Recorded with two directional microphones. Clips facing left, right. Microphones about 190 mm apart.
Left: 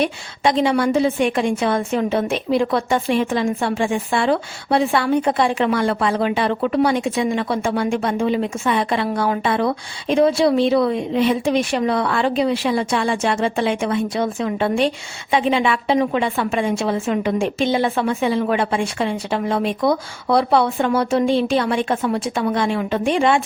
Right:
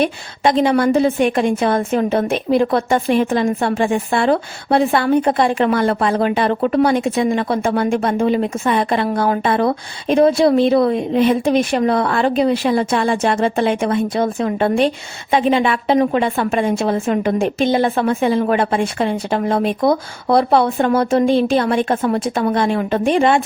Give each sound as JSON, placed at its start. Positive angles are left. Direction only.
{"t": 0.0, "sound": "a woman's voice", "side_deg": -50}